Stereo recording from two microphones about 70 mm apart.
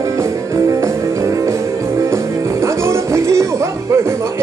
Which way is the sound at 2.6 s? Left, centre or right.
Right.